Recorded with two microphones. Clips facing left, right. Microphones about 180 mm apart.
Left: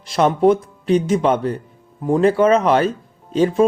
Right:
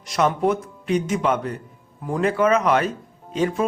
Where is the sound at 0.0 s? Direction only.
30° left (ahead or behind).